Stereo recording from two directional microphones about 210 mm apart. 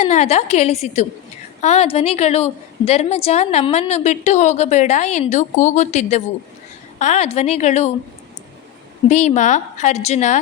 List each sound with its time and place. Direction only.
0.0 s a woman's voice: 30° left (ahead or behind)
9.0 s a woman's voice: 35° left (ahead or behind)